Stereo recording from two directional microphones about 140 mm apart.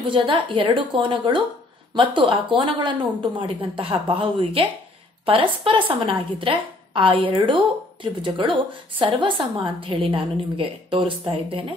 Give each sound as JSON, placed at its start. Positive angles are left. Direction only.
{"t": 0.0, "sound": "a woman's voice", "side_deg": -35}